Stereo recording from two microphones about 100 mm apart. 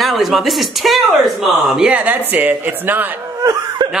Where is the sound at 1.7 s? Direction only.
10° right (ahead or behind).